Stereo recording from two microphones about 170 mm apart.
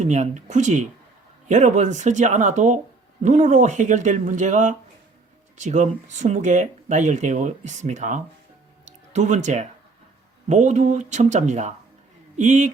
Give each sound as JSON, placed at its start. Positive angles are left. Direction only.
{"t": 0.0, "sound": "speech", "side_deg": -45}
{"t": 8.8, "sound": "music", "side_deg": -45}
{"t": 10.5, "sound": "speech", "side_deg": -45}